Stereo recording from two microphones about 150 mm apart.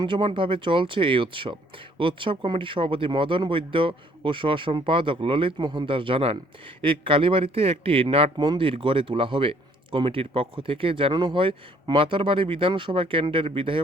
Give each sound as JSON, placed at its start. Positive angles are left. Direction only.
{"t": 0.0, "sound": "speech", "side_deg": -35}